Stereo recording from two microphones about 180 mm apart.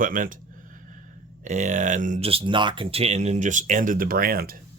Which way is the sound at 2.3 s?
30° right (ahead or behind).